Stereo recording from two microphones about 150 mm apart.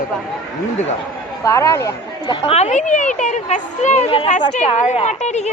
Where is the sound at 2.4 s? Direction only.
45° left (ahead or behind).